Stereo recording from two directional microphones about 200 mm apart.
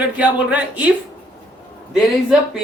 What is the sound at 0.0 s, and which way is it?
Speech, 5° right (ahead or behind).